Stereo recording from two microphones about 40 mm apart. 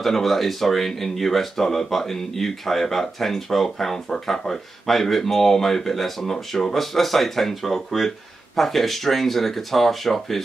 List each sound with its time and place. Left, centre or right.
0.0 s speech: centre
6.3 s speech: centre
6.7 s speech: centre